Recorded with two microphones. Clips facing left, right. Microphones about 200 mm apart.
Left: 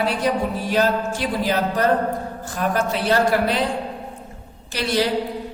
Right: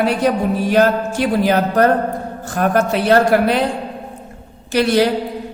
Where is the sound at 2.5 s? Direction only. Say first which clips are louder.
Right 6 dB; 65° right (ahead or behind).